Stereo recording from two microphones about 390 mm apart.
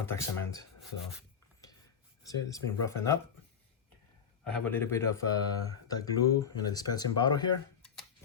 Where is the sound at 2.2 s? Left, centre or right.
Centre.